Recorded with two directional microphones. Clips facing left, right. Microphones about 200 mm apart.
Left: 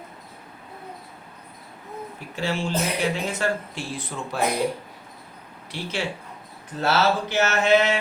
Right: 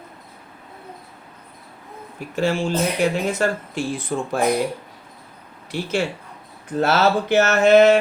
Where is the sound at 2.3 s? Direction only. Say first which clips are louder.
Right 5 dB; 50° right (ahead or behind).